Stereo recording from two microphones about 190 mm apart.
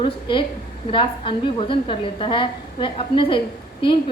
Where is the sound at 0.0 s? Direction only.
25° left (ahead or behind).